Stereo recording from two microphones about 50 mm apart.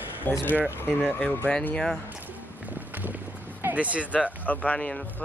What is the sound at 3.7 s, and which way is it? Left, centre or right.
Speech, right.